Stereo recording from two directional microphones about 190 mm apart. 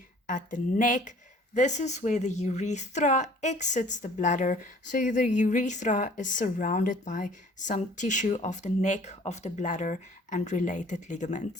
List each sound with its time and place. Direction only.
0.3 s a woman's voice: 40° left (ahead or behind)